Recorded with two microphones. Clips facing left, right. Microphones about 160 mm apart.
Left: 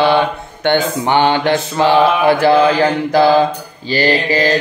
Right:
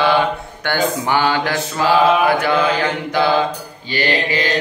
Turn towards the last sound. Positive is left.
turn(degrees=40)  # may be behind; listen again after turning